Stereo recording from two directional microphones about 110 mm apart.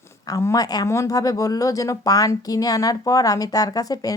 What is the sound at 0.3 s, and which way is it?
A woman's voice, 35° left (ahead or behind).